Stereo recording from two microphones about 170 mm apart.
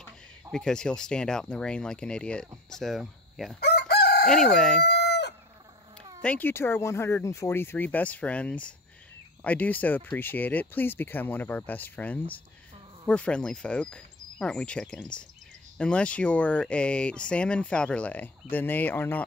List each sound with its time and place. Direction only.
0.0 s speech: 5° left (ahead or behind)
3.5 s chicken: 70° left (ahead or behind)
4.3 s speech: centre (ahead or behind)
4.8 s crowing: 80° left
6.2 s speech: 10° left (ahead or behind)